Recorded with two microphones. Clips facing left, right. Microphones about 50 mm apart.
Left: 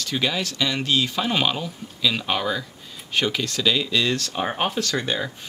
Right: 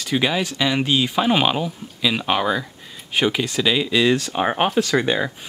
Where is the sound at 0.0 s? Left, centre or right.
Centre.